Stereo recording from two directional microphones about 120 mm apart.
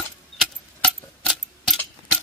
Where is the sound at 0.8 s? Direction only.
5° left (ahead or behind).